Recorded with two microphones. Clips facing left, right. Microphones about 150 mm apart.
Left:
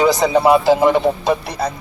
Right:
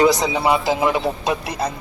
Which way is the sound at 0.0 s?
Centre (ahead or behind).